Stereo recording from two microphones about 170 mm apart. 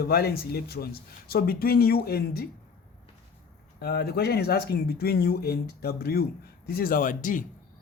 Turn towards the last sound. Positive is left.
turn(degrees=50)  # may be behind; listen again after turning